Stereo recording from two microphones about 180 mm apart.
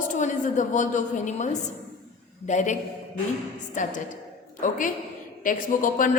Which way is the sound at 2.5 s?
40° left (ahead or behind).